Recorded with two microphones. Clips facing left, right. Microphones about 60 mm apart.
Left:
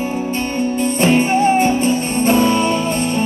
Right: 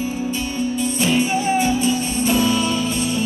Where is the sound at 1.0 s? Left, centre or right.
Left.